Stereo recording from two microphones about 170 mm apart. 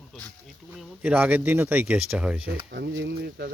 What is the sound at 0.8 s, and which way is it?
Speech, 10° right (ahead or behind).